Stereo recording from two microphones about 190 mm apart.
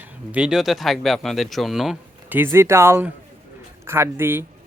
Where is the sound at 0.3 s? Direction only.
5° right (ahead or behind).